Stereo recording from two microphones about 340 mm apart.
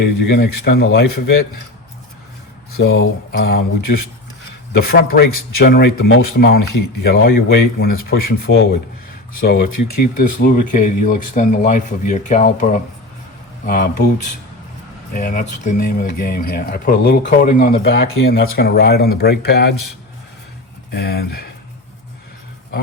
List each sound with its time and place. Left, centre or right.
0.3 s speech: left
2.7 s speech: left
4.7 s speech: left
15.1 s speech: left
20.9 s speech: left